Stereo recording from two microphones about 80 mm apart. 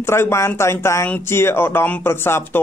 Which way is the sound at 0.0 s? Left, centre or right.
Left.